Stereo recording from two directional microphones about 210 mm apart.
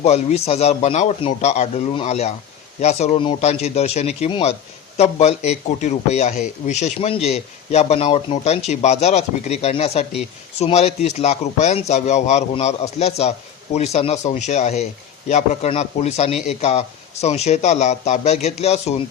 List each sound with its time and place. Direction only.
0.0 s speech: 30° left (ahead or behind)